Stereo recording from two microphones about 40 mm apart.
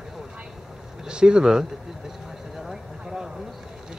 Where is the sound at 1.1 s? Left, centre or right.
Right.